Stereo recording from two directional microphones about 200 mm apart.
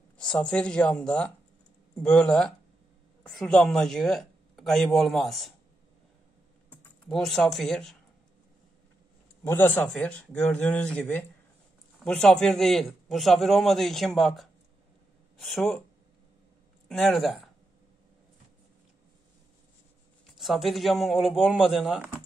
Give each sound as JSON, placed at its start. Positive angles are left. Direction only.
{"t": 0.2, "sound": "a man's voice", "side_deg": 5}
{"t": 6.7, "sound": "speech", "side_deg": 5}
{"t": 9.4, "sound": "a man's voice", "side_deg": 10}
{"t": 16.9, "sound": "a man's voice", "side_deg": 0}
{"t": 20.2, "sound": "a man's voice", "side_deg": 0}